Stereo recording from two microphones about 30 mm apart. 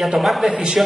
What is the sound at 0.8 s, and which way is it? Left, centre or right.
Speech, right.